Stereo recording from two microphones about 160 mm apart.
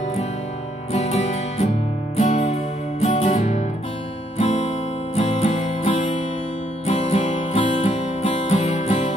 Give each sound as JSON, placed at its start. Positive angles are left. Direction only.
{"t": 0.9, "sound": "music", "side_deg": 40}
{"t": 4.4, "sound": "guitar", "side_deg": 45}
{"t": 5.1, "sound": "music", "side_deg": 40}